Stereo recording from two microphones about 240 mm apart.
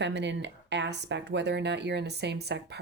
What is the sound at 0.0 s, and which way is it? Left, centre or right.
Speech, right.